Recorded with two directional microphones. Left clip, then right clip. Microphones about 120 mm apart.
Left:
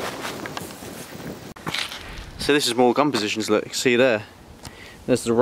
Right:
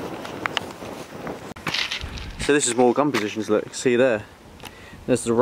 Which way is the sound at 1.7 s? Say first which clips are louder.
Right 3 dB; centre (ahead or behind).